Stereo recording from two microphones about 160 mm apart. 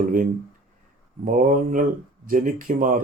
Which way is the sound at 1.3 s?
55° right (ahead or behind).